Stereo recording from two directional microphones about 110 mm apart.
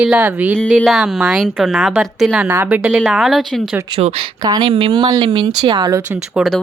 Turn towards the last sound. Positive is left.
turn(degrees=0)  # may be behind; listen again after turning